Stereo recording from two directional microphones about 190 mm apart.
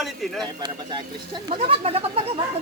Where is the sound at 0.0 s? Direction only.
Centre (ahead or behind).